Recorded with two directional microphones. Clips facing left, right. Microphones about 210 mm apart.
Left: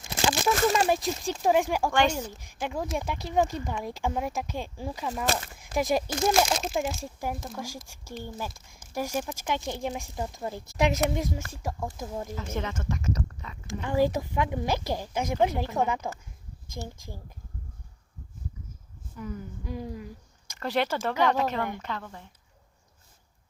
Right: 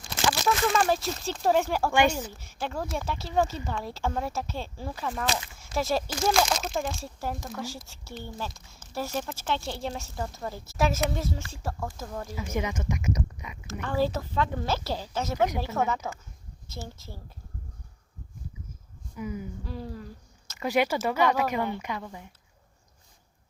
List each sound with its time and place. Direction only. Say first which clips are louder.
0.0 s a sound: left 1 dB; 25° left (ahead or behind)
0.7 s speech: left 1 dB; 20° left (ahead or behind)
1.9 s speech: right 4 dB; 10° right (ahead or behind)
2.3 s speech: left 1 dB; 15° left (ahead or behind)
5.2 s speech: left 2 dB; 50° left (ahead or behind)
5.7 s speech: left 2 dB; 15° left (ahead or behind)
12.3 s speech: right 2 dB; 10° right (ahead or behind)
13.8 s speech: left 2 dB; 15° left (ahead or behind)
19.1 s speech: right 2 dB; 10° right (ahead or behind)
19.6 s speech: left 2 dB; 15° left (ahead or behind)
20.6 s speech: right 2 dB; 10° right (ahead or behind)